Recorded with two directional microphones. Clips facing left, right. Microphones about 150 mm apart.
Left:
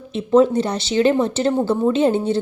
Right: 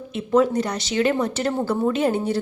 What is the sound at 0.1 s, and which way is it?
A woman's voice, 25° left (ahead or behind).